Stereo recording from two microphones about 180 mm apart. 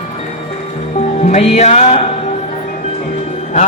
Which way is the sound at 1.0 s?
40° left (ahead or behind).